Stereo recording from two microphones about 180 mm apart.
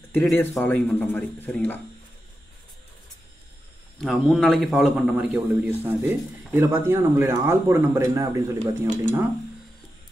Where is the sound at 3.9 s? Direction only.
Centre (ahead or behind); by 8.6 s 15° right (ahead or behind).